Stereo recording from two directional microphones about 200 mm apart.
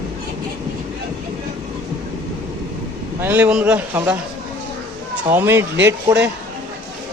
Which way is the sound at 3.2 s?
10° right (ahead or behind).